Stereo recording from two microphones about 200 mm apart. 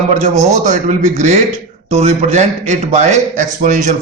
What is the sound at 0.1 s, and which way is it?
A man's voice, 35° right (ahead or behind).